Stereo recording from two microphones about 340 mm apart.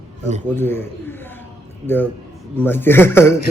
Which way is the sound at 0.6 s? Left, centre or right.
Centre.